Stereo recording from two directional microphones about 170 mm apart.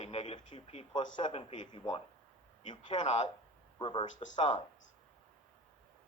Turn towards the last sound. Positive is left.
turn(degrees=25)  # may be behind; listen again after turning